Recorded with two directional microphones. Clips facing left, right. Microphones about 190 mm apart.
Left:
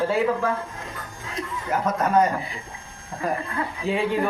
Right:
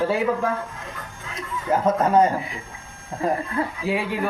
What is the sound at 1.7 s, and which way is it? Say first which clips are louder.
Speech: right 3 dB; 30° right (ahead or behind).